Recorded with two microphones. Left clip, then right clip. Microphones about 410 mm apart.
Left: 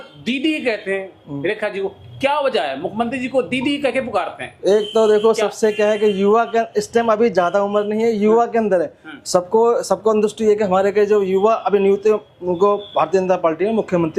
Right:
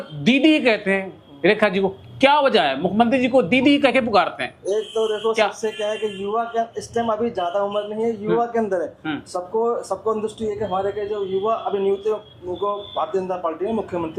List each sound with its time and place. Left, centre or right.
0.4 s speech: centre
4.6 s speech: left